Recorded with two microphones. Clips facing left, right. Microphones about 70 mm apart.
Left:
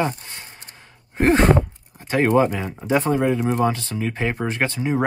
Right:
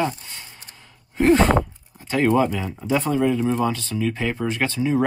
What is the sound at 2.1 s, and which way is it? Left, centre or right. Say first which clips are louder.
Speech: left 1 dB; left.